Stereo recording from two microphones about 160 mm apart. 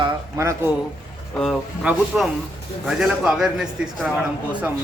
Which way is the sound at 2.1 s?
5° right (ahead or behind).